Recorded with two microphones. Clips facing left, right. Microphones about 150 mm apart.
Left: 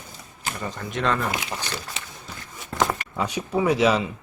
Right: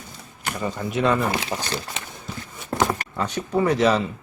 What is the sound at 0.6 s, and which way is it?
Speech, 10° right (ahead or behind).